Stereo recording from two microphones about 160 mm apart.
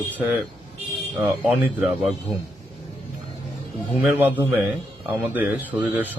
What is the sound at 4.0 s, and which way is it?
Speech, 5° right (ahead or behind).